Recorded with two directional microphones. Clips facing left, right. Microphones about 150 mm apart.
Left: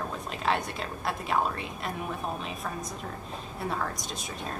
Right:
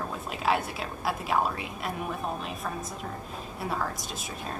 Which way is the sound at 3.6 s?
Centre (ahead or behind).